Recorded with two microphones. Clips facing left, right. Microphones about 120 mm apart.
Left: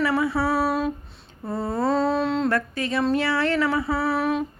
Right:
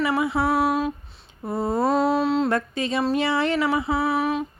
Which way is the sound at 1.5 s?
20° right (ahead or behind).